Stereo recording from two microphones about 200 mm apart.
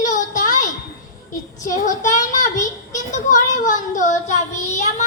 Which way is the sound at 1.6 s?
40° left (ahead or behind).